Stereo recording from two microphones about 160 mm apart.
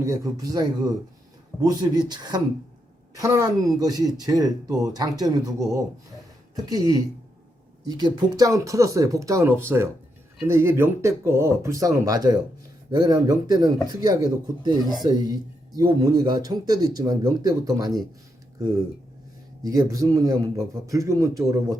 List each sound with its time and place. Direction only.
0.0 s a man's voice: 20° right (ahead or behind)
19.6 s a man's voice: 25° right (ahead or behind)